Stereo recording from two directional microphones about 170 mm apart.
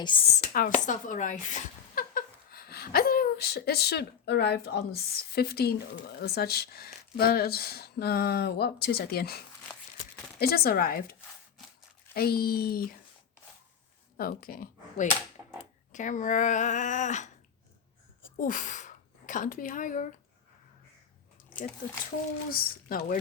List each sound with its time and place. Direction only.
0.0 s speech: 30° left (ahead or behind)
0.5 s speech: 50° left (ahead or behind)
10.4 s speech: 65° left (ahead or behind)
14.2 s speech: 60° left (ahead or behind)
15.9 s speech: 45° left (ahead or behind)
18.3 s speech: 50° left (ahead or behind)
22.4 s speech: 60° left (ahead or behind)